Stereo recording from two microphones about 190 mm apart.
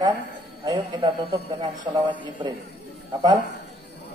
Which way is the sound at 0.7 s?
25° right (ahead or behind).